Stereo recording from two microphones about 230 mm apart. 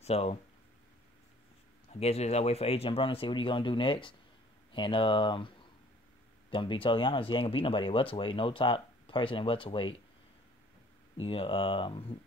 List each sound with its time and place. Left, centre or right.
0.0 s speech: left
1.9 s speech: left
6.5 s speech: left
11.1 s speech: left